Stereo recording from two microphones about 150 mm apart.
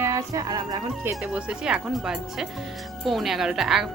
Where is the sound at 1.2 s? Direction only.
5° right (ahead or behind).